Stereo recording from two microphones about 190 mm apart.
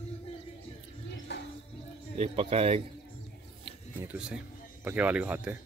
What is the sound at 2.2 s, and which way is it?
Speech, 30° right (ahead or behind).